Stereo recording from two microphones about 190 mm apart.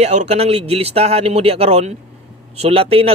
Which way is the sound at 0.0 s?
35° right (ahead or behind).